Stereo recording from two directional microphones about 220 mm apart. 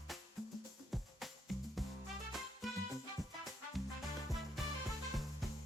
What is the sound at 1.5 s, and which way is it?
Music, centre (ahead or behind).